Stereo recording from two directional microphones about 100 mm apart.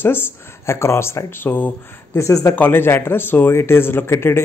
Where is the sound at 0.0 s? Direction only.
20° left (ahead or behind).